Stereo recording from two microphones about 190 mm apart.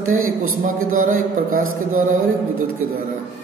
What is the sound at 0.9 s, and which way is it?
Mantra, 45° right (ahead or behind).